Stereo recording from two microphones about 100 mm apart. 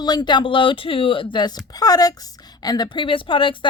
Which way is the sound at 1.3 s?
45° left (ahead or behind).